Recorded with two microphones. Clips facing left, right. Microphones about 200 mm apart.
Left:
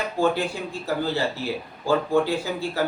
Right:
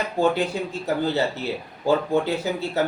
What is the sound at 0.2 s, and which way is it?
Speech, 20° right (ahead or behind).